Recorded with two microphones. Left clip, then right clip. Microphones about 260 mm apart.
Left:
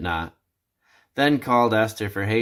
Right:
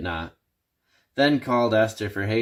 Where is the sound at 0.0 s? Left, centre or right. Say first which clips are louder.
Left 4 dB; centre.